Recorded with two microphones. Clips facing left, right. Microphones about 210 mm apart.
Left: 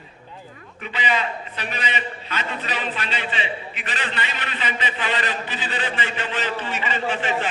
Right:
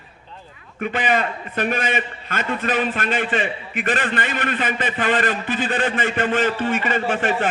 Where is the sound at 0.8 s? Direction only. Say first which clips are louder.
Right 5 dB; 50° right (ahead or behind).